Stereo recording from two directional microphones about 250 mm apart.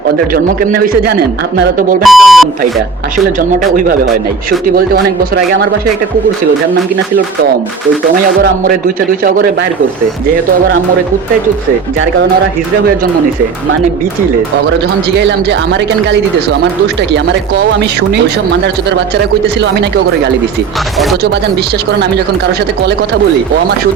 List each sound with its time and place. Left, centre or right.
0.3 s a man's voice: right
2.0 s speech: centre
3.3 s a man's voice: right
8.2 s a man's voice: right
15.2 s speech: right
19.6 s speech: right